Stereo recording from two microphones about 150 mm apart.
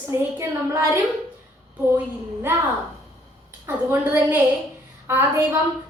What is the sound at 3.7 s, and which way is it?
A woman's voice, 15° right (ahead or behind).